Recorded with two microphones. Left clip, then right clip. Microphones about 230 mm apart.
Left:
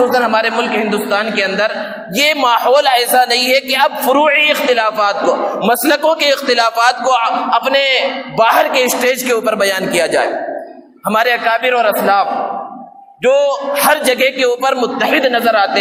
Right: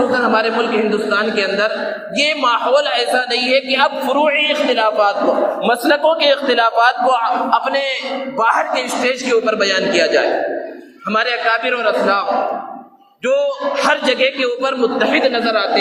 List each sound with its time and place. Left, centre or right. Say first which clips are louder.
0.1 s a man's voice: left 2 dB; left
13.2 s a man's voice: left 4 dB; left